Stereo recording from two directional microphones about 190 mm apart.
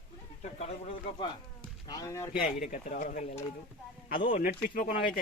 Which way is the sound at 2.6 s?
45° left (ahead or behind).